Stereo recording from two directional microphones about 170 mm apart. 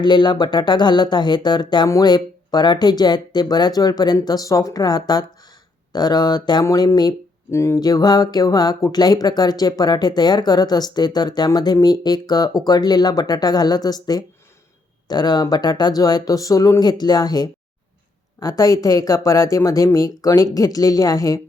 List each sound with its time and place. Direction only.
0.0 s speech: 25° left (ahead or behind)